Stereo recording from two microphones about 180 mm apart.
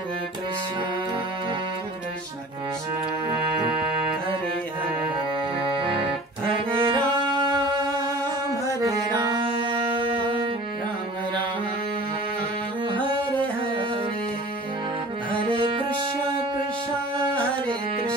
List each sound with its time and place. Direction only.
5.7 s music: 30° right (ahead or behind)
12.8 s music: 25° right (ahead or behind)
15.4 s music: 25° right (ahead or behind)